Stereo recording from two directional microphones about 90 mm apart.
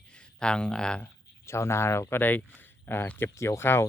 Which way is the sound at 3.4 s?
30° left (ahead or behind).